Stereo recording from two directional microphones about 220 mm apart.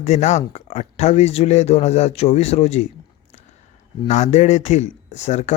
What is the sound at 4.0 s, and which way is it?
Speech, 30° left (ahead or behind).